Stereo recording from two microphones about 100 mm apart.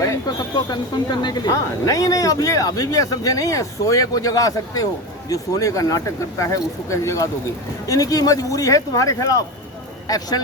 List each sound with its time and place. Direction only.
0.5 s speech: 45° left (ahead or behind)
1.5 s speech: 35° left (ahead or behind)